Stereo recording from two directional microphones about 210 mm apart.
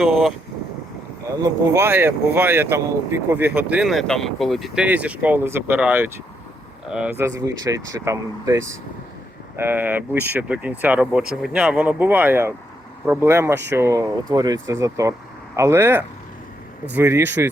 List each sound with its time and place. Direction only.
0.0 s speech: centre (ahead or behind)
1.3 s speech: 15° right (ahead or behind)